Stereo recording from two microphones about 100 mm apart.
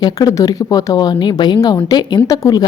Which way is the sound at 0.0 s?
40° left (ahead or behind).